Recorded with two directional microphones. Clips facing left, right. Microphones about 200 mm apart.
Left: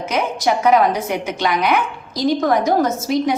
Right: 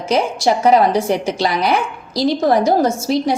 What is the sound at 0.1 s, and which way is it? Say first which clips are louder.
A woman's voice: right 4 dB; 35° right (ahead or behind).